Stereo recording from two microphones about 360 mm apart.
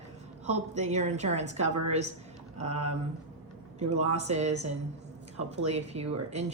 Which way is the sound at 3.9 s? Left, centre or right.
Centre.